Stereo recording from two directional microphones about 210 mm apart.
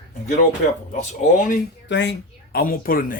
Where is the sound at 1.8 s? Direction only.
60° left (ahead or behind).